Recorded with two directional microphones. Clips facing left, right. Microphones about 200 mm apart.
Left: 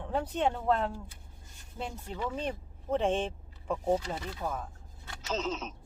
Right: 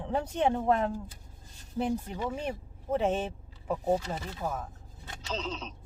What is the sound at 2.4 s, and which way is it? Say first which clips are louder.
Speech: even; 10° right (ahead or behind).